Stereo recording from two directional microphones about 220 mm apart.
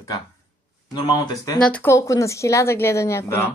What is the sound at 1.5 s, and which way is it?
Speech, 5° left (ahead or behind).